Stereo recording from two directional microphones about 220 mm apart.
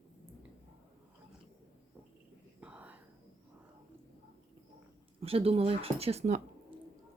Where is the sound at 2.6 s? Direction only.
5° right (ahead or behind).